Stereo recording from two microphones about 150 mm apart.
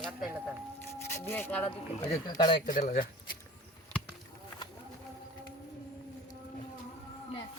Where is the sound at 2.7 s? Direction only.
70° left (ahead or behind).